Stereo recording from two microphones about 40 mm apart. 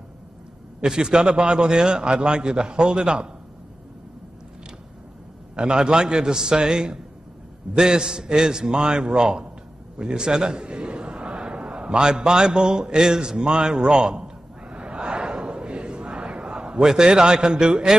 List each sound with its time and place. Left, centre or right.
0.7 s a man's voice: centre
5.6 s a man's voice: right
9.9 s a sound: right
16.9 s a man's voice: centre